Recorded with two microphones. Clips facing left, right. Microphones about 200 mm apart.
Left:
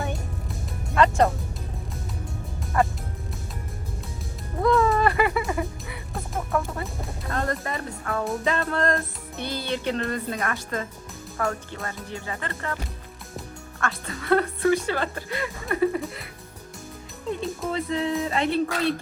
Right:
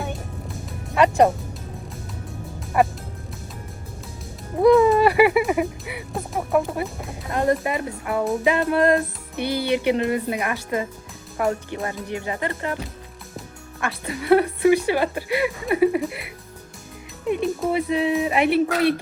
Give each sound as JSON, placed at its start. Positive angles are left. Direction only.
{"t": 0.9, "sound": "a woman's voice", "side_deg": -15}
{"t": 2.7, "sound": "a woman's voice", "side_deg": -15}
{"t": 4.6, "sound": "a woman's voice", "side_deg": -15}
{"t": 13.7, "sound": "a woman's voice", "side_deg": -15}
{"t": 17.2, "sound": "a woman's voice", "side_deg": -15}